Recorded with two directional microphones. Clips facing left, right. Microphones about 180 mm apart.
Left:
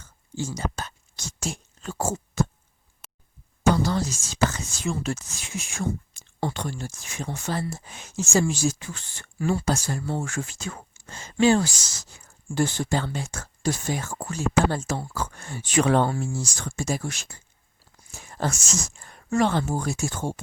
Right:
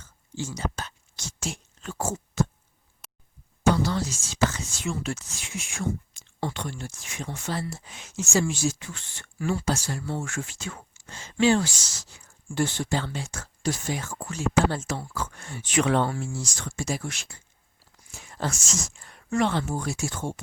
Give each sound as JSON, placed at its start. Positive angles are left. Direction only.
{"t": 0.4, "sound": "a sound", "side_deg": 45}
{"t": 3.8, "sound": "speech", "side_deg": 40}
{"t": 9.7, "sound": "speech", "side_deg": 50}
{"t": 10.1, "sound": "speech", "side_deg": 35}
{"t": 16.2, "sound": "speech", "side_deg": 45}
{"t": 18.1, "sound": "a sound", "side_deg": 45}
{"t": 18.9, "sound": "speech", "side_deg": 40}